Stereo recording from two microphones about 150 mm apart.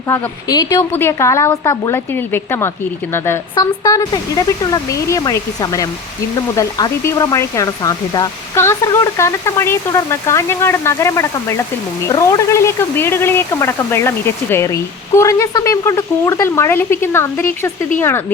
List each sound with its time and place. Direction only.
0.1 s speech: 25° left (ahead or behind)